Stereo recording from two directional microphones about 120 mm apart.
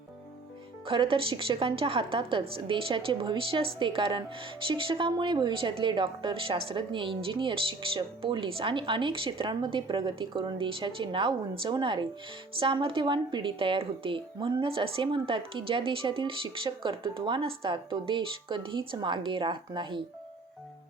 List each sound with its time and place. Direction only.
0.9 s a woman's voice: 45° right (ahead or behind)